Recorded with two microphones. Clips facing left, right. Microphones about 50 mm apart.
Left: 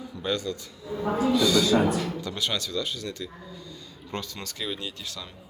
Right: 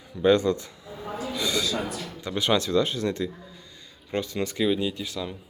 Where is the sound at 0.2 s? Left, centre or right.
Right.